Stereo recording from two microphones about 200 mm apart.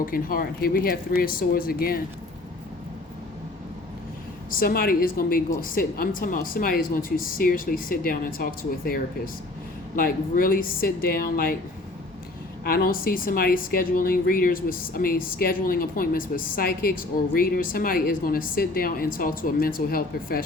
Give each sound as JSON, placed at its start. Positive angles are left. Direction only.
{"t": 0.0, "sound": "a woman's voice", "side_deg": 45}
{"t": 4.5, "sound": "a woman's voice", "side_deg": 45}
{"t": 12.6, "sound": "a woman's voice", "side_deg": 45}